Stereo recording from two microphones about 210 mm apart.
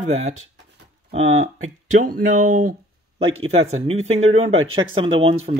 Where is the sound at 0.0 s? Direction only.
30° right (ahead or behind).